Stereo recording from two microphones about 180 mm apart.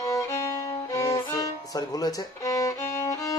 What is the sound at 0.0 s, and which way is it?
Violin, 15° left (ahead or behind).